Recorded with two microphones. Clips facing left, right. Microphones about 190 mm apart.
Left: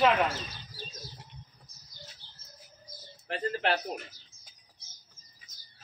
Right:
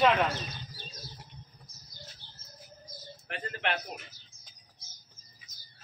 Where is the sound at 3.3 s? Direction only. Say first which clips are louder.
Left 5 dB; 35° left (ahead or behind).